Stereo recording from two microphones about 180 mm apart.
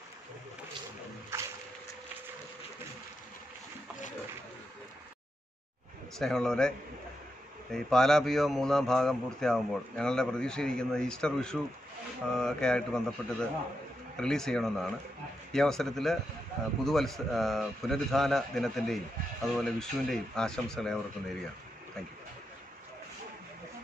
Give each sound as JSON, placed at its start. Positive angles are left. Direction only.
{"t": 1.3, "sound": "a sound", "side_deg": -15}
{"t": 6.1, "sound": "a man's voice", "side_deg": 5}
{"t": 7.7, "sound": "a man's voice", "side_deg": 0}